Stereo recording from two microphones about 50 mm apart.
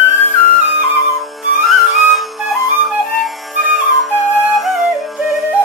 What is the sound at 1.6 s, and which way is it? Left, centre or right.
Music, centre.